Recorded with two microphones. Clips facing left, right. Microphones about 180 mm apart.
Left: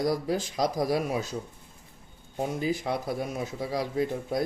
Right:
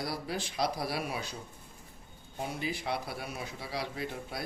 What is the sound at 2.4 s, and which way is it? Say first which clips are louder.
A man's voice: left 7 dB; 45° left (ahead or behind).